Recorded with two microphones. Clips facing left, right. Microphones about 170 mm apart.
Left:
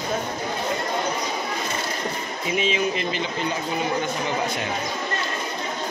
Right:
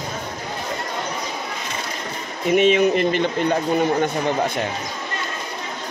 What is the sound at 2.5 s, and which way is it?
Speech, 60° right (ahead or behind).